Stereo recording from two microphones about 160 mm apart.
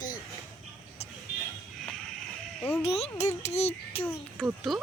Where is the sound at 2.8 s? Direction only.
40° left (ahead or behind).